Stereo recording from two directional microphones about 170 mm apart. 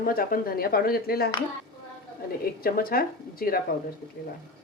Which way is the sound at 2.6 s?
60° left (ahead or behind).